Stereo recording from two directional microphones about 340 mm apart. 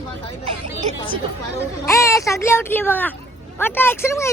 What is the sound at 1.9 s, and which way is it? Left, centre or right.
A woman's voice, centre.